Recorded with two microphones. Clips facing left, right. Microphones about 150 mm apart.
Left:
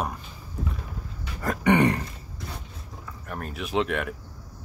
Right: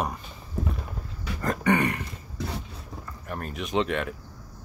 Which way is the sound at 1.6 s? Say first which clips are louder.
Left 4 dB; 25° left (ahead or behind).